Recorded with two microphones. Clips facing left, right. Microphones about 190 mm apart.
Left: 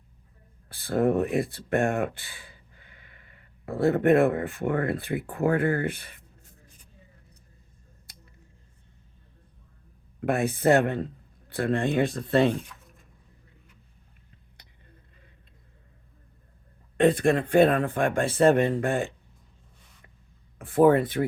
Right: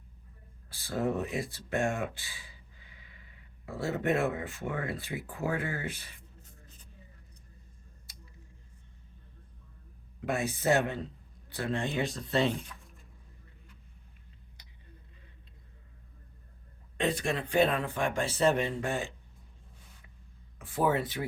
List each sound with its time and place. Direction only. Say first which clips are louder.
0.7 s speech: left 8 dB; 55° left (ahead or behind)
8.1 s a sound: left 1 dB; 55° left (ahead or behind)
10.2 s a man's voice: left 6 dB; 55° left (ahead or behind)
17.0 s speech: left 10 dB; 55° left (ahead or behind)
20.6 s speech: left 10 dB; 55° left (ahead or behind)